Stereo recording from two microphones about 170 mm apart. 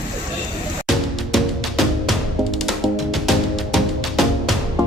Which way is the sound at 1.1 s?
Centre (ahead or behind).